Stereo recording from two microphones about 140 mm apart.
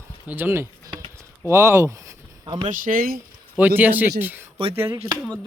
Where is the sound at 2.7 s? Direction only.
75° right (ahead or behind).